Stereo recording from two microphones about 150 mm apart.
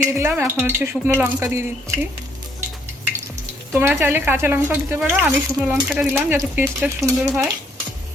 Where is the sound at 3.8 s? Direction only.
15° right (ahead or behind).